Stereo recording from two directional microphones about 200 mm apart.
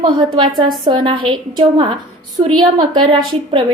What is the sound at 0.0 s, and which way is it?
A woman's voice, 25° right (ahead or behind).